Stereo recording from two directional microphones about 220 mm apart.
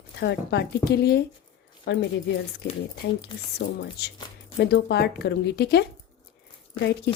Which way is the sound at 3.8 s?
50° left (ahead or behind).